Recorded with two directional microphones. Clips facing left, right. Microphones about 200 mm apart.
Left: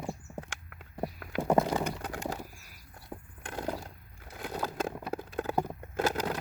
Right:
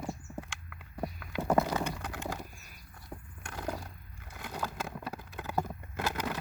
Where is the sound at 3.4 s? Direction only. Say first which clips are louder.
Left 5 dB; 25° left (ahead or behind).